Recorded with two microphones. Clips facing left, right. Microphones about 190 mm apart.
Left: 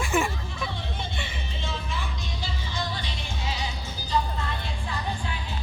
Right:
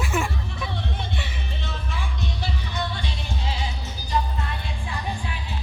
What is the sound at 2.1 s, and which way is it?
Music, 65° right (ahead or behind).